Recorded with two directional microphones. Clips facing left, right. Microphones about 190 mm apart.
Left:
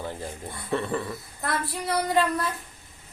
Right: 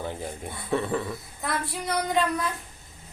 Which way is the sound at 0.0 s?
15° right (ahead or behind).